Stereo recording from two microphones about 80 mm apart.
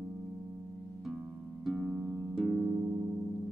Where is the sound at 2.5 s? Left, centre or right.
Centre.